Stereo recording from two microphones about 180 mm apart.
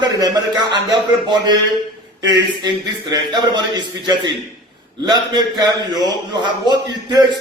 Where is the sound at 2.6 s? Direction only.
25° right (ahead or behind).